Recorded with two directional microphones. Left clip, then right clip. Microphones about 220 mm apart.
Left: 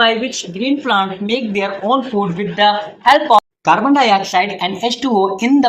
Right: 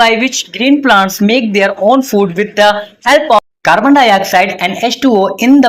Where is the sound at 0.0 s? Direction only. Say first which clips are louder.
Right 5 dB; 40° right (ahead or behind).